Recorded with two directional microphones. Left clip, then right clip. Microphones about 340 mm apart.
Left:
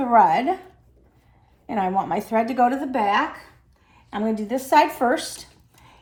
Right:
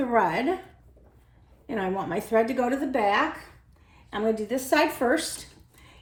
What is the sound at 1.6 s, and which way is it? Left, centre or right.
A woman's voice, centre.